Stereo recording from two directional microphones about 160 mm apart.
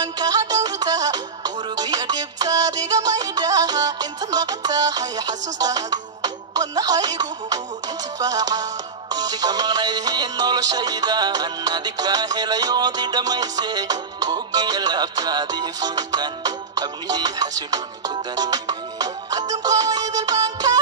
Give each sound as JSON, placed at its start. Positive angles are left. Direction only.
{"t": 0.0, "sound": "music", "side_deg": -25}